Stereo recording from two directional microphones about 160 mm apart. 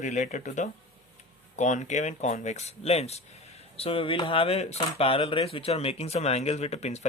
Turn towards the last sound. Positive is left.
turn(degrees=45)  # may be behind; listen again after turning